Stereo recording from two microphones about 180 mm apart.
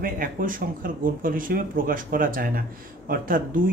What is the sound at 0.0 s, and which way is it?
A man's voice, 50° right (ahead or behind).